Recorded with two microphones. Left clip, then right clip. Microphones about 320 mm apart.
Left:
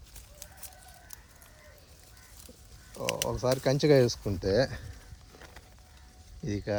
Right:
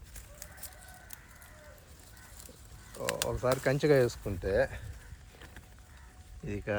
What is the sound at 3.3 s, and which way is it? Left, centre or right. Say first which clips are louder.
Speech: left 1 dB; left.